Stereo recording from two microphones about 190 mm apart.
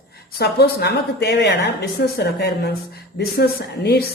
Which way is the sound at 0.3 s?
60° left (ahead or behind).